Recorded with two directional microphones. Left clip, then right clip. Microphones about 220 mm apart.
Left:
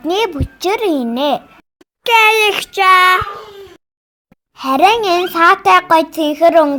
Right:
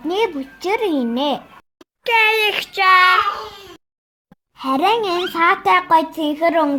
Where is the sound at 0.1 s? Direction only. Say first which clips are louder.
Left 3 dB; 45° left (ahead or behind).